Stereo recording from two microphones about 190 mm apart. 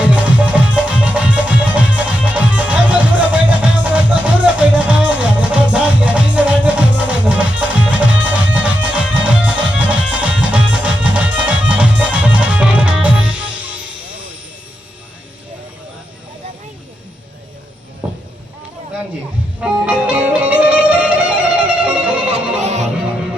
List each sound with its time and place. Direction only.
0.0 s music: 5° right (ahead or behind)
18.0 s a sound: 5° right (ahead or behind)
19.6 s music: 5° right (ahead or behind)
22.6 s music: 35° right (ahead or behind)